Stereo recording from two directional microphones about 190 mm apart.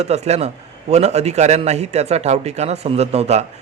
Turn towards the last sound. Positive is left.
turn(degrees=-35)  # may be behind; listen again after turning